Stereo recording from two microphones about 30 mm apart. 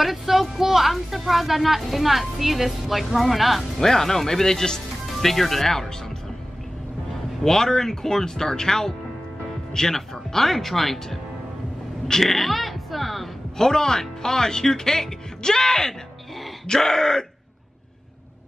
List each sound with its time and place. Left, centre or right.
0.0 s speech: centre
3.8 s speech: centre
7.4 s speech: centre
13.6 s speech: centre